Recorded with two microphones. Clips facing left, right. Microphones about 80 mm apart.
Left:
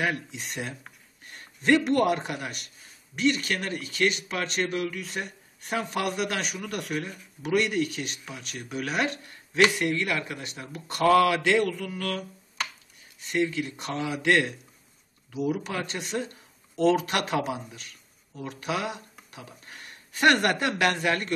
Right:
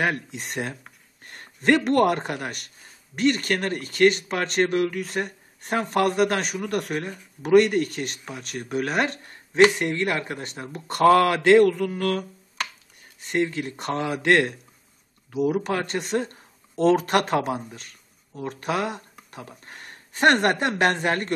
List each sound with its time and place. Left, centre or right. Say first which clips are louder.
0.0 s speech: right 3 dB; right
13.3 s a woman's voice: right 2 dB; right